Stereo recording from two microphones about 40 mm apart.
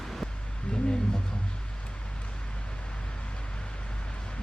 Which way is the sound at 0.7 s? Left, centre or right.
Left.